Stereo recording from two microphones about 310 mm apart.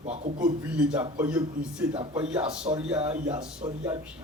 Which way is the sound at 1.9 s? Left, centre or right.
Centre.